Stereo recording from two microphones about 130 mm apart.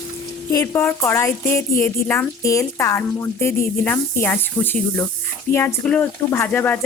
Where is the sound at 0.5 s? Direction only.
20° left (ahead or behind).